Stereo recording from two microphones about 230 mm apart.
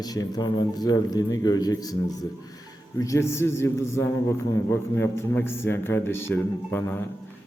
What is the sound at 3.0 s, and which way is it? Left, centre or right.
A man's voice, centre.